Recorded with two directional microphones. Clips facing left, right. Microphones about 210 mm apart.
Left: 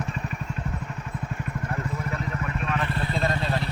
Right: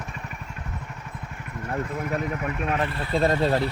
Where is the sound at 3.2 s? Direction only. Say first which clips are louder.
Right 8 dB; 40° right (ahead or behind).